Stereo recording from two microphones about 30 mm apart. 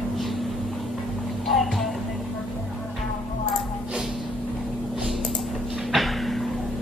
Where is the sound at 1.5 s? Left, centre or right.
Centre.